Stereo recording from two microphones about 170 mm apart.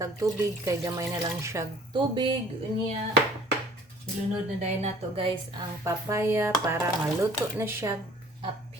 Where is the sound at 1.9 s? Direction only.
30° right (ahead or behind).